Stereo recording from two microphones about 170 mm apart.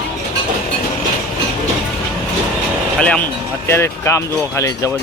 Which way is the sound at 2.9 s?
5° left (ahead or behind).